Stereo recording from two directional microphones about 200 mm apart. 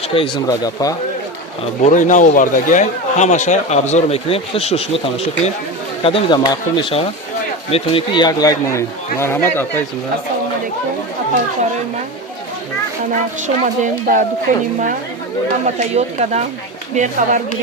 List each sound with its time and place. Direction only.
0.1 s speech: 25° left (ahead or behind)
1.8 s speech: 40° left (ahead or behind); by 9.8 s 10° left (ahead or behind)
13.6 s speech: 40° right (ahead or behind)